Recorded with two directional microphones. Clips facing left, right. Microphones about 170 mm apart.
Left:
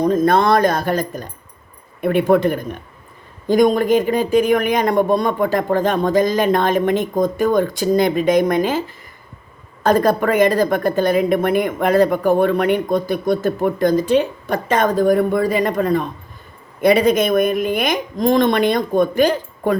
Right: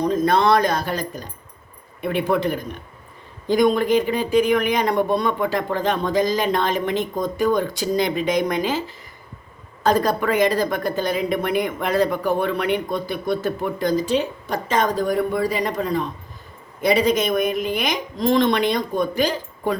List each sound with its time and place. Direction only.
0.0 s a woman's voice: 50° left (ahead or behind)
9.8 s a woman's voice: 50° left (ahead or behind)